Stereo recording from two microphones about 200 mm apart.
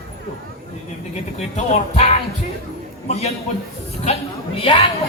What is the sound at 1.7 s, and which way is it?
A man's voice, 30° left (ahead or behind).